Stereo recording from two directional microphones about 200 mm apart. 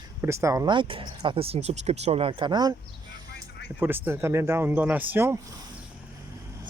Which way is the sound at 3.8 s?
10° right (ahead or behind).